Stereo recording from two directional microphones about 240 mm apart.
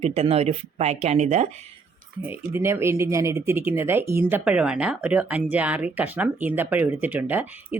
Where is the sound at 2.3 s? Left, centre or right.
Centre.